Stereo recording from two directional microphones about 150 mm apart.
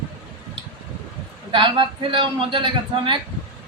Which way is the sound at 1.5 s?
35° right (ahead or behind).